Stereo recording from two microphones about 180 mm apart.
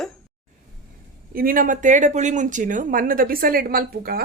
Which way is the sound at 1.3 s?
50° right (ahead or behind).